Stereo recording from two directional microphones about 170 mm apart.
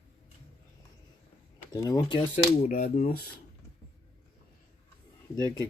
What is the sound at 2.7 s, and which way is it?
Speech, 50° left (ahead or behind).